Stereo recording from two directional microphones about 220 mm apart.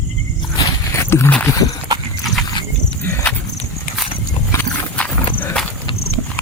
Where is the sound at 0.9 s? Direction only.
15° left (ahead or behind).